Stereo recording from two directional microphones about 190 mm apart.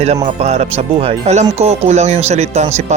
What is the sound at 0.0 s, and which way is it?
Speech, 35° right (ahead or behind).